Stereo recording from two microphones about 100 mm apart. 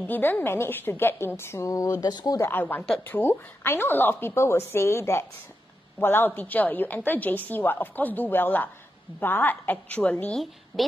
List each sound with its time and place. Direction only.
0.0 s a woman's voice: 20° left (ahead or behind); by 2.4 s 40° left (ahead or behind)
2.4 s a woman's voice: 20° left (ahead or behind)
10.7 s a woman's voice: 5° right (ahead or behind)